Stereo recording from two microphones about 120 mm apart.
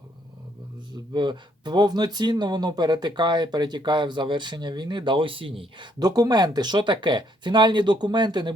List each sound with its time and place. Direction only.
1.1 s speech: 40° right (ahead or behind)
6.0 s speech: 35° right (ahead or behind)